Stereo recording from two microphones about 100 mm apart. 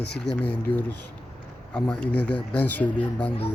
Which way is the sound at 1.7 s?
15° left (ahead or behind).